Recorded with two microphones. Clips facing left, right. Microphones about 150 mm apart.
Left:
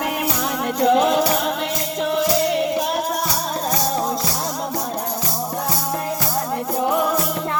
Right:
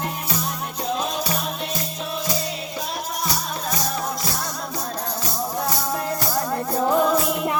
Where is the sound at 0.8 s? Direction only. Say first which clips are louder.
Left 11 dB; 70° left (ahead or behind).